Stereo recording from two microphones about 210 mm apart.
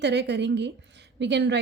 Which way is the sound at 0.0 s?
55° right (ahead or behind).